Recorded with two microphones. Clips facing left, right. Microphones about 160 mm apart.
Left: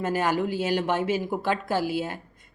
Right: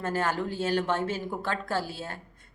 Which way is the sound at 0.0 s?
10° left (ahead or behind).